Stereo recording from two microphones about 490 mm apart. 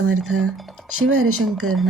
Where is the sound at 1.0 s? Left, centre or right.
Right.